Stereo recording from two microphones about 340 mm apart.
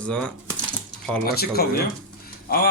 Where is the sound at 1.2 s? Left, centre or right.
Left.